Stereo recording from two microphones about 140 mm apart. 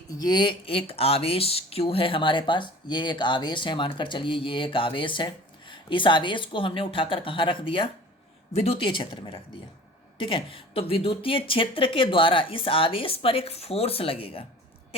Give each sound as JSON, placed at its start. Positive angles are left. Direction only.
{"t": 0.1, "sound": "speech", "side_deg": 30}